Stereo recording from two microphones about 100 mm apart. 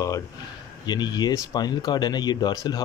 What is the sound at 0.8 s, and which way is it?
Speech, 45° left (ahead or behind).